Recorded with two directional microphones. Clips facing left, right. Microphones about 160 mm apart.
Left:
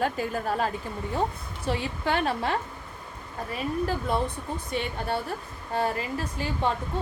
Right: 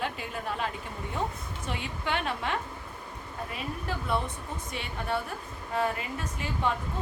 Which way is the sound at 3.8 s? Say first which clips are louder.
Left 2 dB; 35° left (ahead or behind).